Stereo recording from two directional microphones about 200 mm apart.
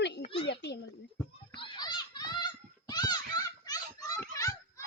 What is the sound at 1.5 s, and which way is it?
Children playing, 25° left (ahead or behind).